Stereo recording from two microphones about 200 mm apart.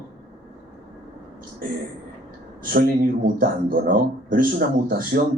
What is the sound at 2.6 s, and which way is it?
A man's voice, 45° right (ahead or behind).